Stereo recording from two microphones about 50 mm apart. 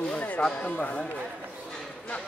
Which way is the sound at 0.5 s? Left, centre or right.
Left.